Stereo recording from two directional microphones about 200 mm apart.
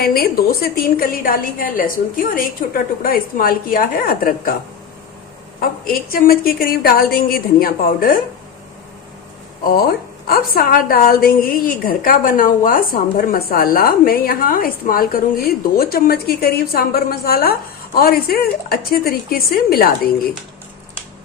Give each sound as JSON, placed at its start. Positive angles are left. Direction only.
{"t": 0.0, "sound": "a woman's voice", "side_deg": 50}
{"t": 5.5, "sound": "a woman's voice", "side_deg": 45}
{"t": 9.7, "sound": "a woman's voice", "side_deg": 50}